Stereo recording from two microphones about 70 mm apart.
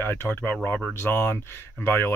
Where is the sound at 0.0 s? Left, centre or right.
Left.